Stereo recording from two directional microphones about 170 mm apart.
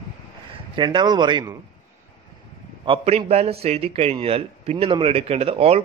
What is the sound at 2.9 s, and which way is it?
A man's voice, 35° right (ahead or behind).